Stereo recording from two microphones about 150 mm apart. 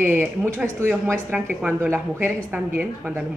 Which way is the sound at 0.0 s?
10° right (ahead or behind).